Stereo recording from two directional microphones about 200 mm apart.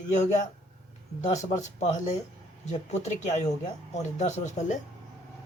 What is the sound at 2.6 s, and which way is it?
Speech, 35° left (ahead or behind).